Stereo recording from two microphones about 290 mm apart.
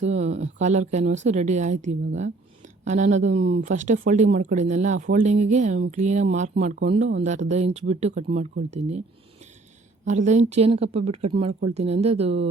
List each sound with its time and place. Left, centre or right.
0.0 s speech: right
10.1 s speech: right